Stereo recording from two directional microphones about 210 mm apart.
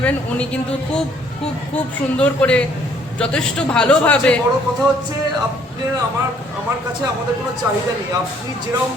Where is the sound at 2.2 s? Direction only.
5° left (ahead or behind).